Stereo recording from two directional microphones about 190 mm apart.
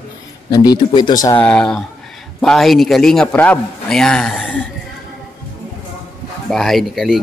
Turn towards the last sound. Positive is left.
turn(degrees=0)  # may be behind; listen again after turning